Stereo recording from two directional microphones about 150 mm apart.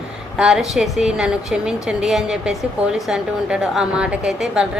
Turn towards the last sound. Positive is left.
turn(degrees=-5)  # may be behind; listen again after turning